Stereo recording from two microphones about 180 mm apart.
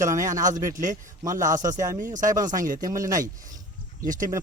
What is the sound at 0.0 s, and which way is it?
Speech, 15° right (ahead or behind).